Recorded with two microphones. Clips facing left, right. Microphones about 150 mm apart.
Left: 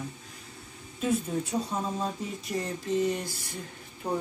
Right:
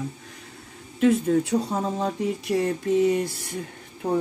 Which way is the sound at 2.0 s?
70° right (ahead or behind).